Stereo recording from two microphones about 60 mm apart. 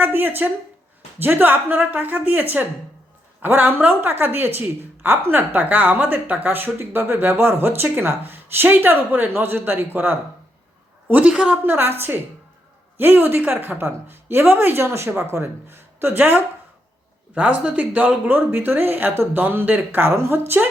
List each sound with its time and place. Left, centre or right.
0.0 s a woman's voice: right
11.1 s a woman's voice: centre
11.6 s a woman's voice: right
17.3 s a woman's voice: right
18.3 s a woman's voice: right